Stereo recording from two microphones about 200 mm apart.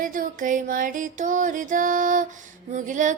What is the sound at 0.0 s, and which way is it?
Music, 40° right (ahead or behind).